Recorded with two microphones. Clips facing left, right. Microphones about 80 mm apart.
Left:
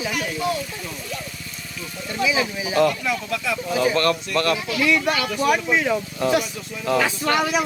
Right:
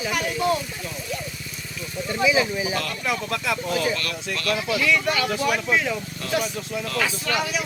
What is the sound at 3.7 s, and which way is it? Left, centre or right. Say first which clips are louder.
Speech: left 6 dB; left.